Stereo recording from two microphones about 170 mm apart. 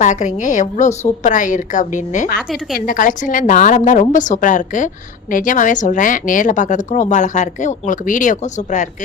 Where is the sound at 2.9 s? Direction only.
50° left (ahead or behind).